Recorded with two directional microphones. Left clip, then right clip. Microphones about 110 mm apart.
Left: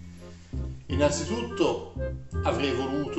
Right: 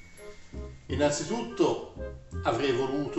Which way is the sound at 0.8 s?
35° left (ahead or behind).